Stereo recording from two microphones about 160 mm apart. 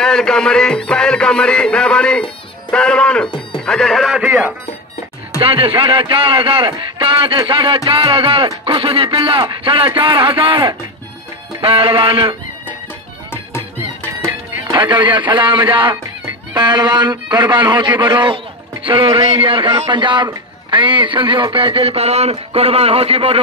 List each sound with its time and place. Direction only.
0.0 s music: 5° left (ahead or behind)
2.7 s speech: 5° left (ahead or behind)
3.5 s music: 5° left (ahead or behind)
5.4 s speech: 35° right (ahead or behind)
14.8 s a man's voice: 30° right (ahead or behind)